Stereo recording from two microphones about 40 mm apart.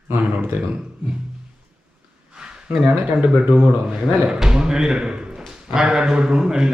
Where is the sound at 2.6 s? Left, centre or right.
Right.